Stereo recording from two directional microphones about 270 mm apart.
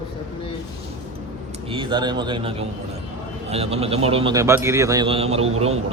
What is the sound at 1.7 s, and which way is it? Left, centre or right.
A man's voice, centre.